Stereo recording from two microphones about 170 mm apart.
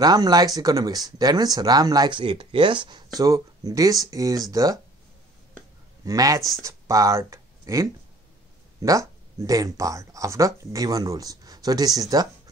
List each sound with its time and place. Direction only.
0.0 s speech: 20° right (ahead or behind)
6.0 s speech: 20° right (ahead or behind)